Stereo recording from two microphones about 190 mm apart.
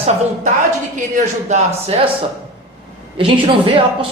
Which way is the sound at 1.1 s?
40° right (ahead or behind).